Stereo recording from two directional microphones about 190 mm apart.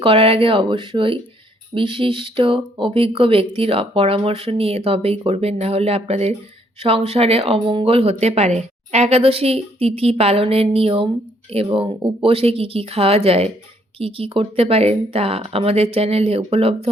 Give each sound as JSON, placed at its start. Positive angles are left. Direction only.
{"t": 0.0, "sound": "speech", "side_deg": -30}